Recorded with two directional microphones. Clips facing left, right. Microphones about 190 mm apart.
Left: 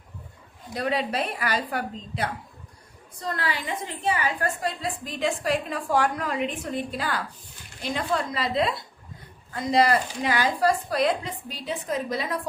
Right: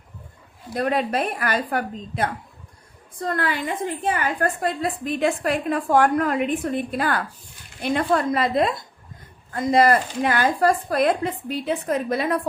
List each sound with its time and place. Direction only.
0.7 s a woman's voice: 50° right (ahead or behind)